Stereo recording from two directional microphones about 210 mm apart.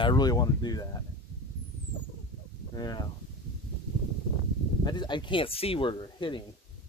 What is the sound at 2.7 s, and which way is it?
Speech, 20° left (ahead or behind).